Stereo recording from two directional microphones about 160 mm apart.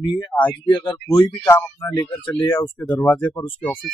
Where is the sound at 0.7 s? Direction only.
30° left (ahead or behind).